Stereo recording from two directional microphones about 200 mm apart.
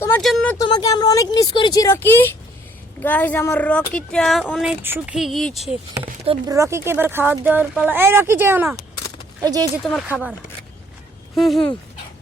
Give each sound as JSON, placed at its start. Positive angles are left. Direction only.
{"t": 0.2, "sound": "speech", "side_deg": 0}
{"t": 0.6, "sound": "speech", "side_deg": 20}
{"t": 6.0, "sound": "speech", "side_deg": -25}
{"t": 6.5, "sound": "speech", "side_deg": -15}
{"t": 10.1, "sound": "speech", "side_deg": 0}
{"t": 11.3, "sound": "speech", "side_deg": 0}